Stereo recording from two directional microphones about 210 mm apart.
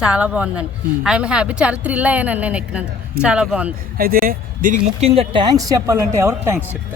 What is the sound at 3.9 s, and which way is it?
Speech, 45° right (ahead or behind).